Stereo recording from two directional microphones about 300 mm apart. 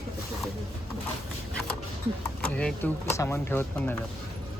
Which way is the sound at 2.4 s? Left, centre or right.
Centre.